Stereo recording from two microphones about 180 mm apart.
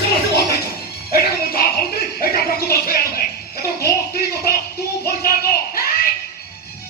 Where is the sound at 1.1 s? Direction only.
60° left (ahead or behind).